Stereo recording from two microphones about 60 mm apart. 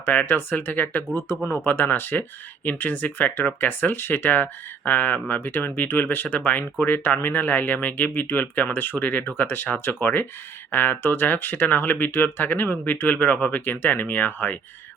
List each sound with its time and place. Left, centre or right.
0.0 s speech: left